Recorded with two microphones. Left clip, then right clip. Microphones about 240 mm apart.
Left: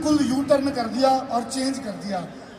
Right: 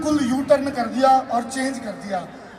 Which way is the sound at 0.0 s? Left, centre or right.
Right.